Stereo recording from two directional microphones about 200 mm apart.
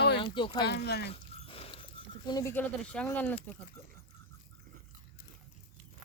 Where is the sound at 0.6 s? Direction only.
55° left (ahead or behind).